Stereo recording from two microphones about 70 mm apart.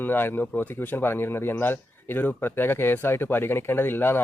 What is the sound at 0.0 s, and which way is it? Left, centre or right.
A man's voice, left.